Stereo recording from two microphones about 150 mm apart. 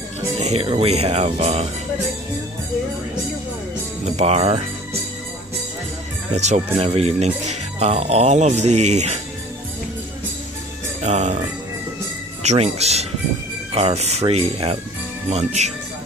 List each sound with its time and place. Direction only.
0.4 s speech: 45° right (ahead or behind)
4.0 s speech: 45° right (ahead or behind)
6.3 s speech: 50° right (ahead or behind)
11.0 s speech: 50° right (ahead or behind)
12.4 s speech: 45° right (ahead or behind)